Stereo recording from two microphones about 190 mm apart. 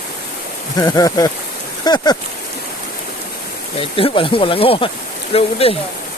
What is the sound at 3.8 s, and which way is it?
Speech, 30° left (ahead or behind).